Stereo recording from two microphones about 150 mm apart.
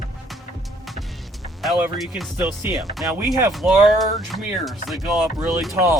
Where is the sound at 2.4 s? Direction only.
15° right (ahead or behind).